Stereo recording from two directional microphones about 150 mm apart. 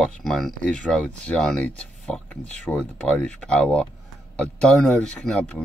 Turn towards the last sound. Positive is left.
turn(degrees=10)  # may be behind; listen again after turning